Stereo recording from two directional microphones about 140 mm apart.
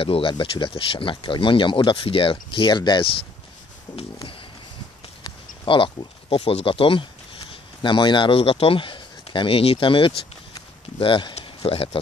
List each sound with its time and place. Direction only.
0.0 s speech: 40° left (ahead or behind)
5.2 s a man's voice: 35° left (ahead or behind)